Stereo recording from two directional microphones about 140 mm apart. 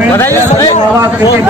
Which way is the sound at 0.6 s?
55° left (ahead or behind).